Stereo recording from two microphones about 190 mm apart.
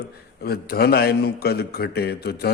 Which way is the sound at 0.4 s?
55° left (ahead or behind).